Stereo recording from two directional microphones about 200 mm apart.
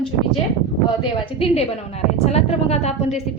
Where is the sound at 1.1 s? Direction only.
25° left (ahead or behind).